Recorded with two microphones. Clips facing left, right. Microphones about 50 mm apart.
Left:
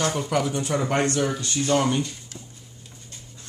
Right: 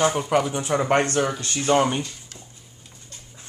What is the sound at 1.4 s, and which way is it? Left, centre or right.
Speech, right.